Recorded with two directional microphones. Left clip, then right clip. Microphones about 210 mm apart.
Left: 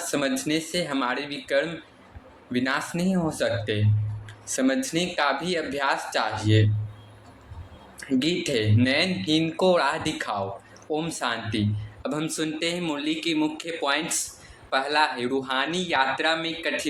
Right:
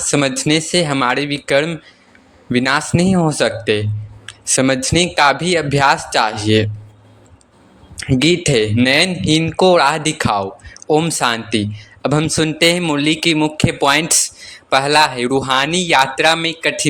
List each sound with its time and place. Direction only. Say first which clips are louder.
0.1 s speech: right 10 dB; 45° right (ahead or behind)
7.9 s speech: right 10 dB; 45° right (ahead or behind)